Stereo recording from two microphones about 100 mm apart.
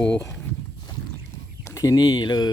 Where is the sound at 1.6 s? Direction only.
30° left (ahead or behind).